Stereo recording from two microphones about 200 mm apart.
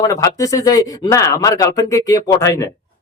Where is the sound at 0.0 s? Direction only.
15° left (ahead or behind).